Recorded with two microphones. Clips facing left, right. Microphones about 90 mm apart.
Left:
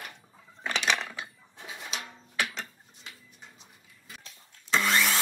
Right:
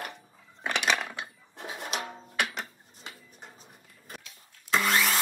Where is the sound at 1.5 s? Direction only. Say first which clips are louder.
Right 5 dB; 40° right (ahead or behind).